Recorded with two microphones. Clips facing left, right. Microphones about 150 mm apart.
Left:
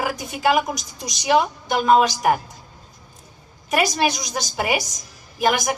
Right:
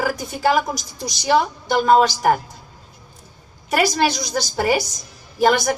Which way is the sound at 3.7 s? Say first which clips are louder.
Right 2 dB; 15° left (ahead or behind).